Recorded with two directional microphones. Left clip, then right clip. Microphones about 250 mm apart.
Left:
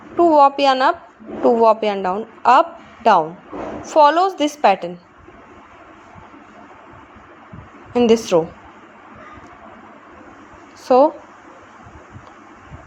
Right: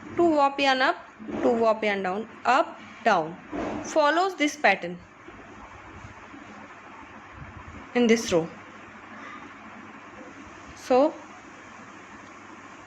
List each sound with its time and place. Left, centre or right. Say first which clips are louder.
0.2 s a woman's voice: left 10 dB; centre
7.9 s a woman's voice: left 8 dB; centre
10.8 s speech: left 8 dB; centre